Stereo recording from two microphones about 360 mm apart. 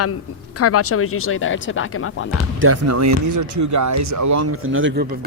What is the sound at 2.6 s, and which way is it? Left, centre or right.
Speech, right.